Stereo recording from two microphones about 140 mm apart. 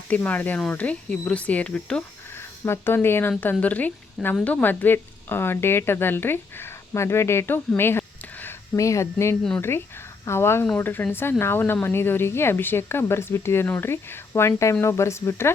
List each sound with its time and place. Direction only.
0.1 s speech: 10° left (ahead or behind)
7.8 s a sound: 15° left (ahead or behind)
9.6 s speech: 15° left (ahead or behind)